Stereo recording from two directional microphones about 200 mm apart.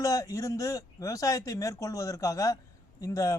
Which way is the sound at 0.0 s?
15° left (ahead or behind).